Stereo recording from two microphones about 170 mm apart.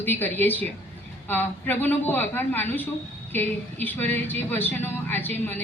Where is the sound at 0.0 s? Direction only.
10° left (ahead or behind).